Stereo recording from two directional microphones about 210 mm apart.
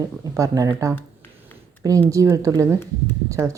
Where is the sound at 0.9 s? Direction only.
10° left (ahead or behind).